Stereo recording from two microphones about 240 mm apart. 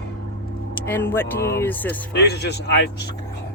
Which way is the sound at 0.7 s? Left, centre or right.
Centre.